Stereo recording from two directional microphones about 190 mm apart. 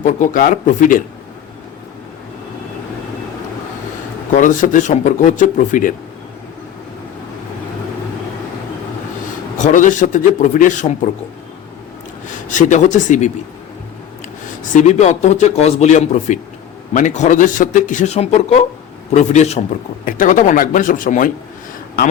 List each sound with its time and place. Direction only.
0.0 s a man's voice: 45° left (ahead or behind)
4.4 s a man's voice: 40° left (ahead or behind)
9.6 s a man's voice: 40° left (ahead or behind)
12.5 s a man's voice: 40° left (ahead or behind)
14.6 s a man's voice: 40° left (ahead or behind)